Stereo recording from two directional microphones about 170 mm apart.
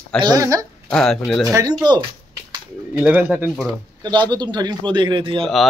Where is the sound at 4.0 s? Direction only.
25° right (ahead or behind).